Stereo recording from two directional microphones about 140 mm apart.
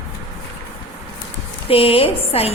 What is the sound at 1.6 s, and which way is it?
Speech, 40° left (ahead or behind).